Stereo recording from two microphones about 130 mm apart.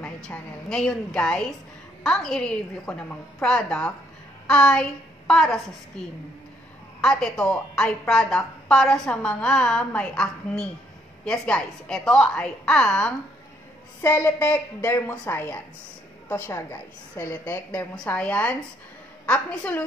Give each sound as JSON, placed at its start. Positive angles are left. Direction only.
{"t": 0.0, "sound": "a woman's voice", "side_deg": 5}
{"t": 4.5, "sound": "a sound", "side_deg": 5}
{"t": 6.0, "sound": "a woman's voice", "side_deg": 5}
{"t": 14.0, "sound": "a woman's voice", "side_deg": 15}